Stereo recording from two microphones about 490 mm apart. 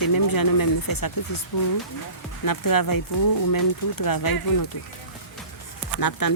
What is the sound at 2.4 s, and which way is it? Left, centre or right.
A woman's voice, left.